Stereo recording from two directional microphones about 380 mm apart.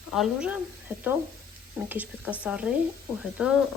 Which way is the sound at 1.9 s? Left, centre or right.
Centre.